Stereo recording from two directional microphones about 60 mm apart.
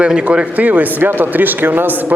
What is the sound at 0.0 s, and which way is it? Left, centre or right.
Speech, centre.